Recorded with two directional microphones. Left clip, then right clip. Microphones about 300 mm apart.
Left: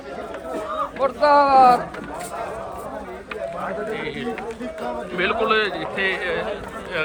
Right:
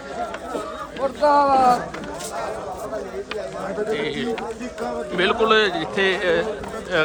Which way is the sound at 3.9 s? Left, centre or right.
Centre.